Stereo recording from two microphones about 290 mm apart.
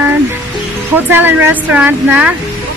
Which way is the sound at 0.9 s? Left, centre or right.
Centre.